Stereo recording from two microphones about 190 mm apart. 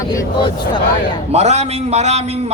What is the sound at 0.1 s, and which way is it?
Speech, 20° left (ahead or behind).